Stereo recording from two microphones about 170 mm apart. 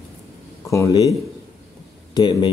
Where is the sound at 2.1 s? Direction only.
25° left (ahead or behind).